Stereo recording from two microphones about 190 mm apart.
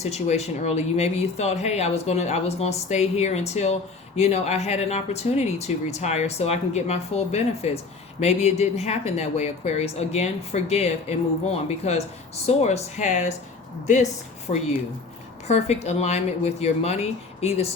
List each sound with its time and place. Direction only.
0.0 s speech: 35° left (ahead or behind)
15.4 s speech: 35° left (ahead or behind)